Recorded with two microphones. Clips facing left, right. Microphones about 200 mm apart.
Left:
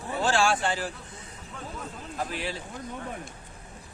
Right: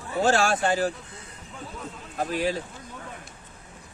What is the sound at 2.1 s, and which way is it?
Speech, 45° right (ahead or behind).